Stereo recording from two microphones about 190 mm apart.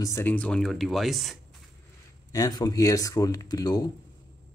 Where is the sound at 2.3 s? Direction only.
20° left (ahead or behind).